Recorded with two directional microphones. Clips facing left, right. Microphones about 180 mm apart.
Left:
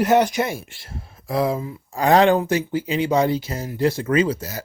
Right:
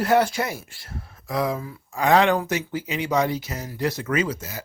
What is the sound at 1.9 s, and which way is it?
Speech, 35° left (ahead or behind).